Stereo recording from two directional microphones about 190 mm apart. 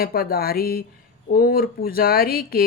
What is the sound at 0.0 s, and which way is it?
Speech, 55° left (ahead or behind).